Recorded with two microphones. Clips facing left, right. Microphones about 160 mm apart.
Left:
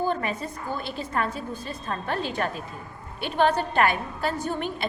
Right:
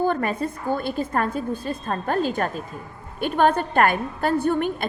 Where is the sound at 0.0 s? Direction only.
50° right (ahead or behind).